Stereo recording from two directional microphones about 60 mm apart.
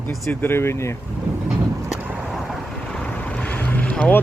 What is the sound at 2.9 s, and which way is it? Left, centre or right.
Boat, left.